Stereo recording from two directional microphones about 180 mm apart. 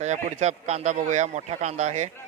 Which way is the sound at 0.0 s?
40° right (ahead or behind).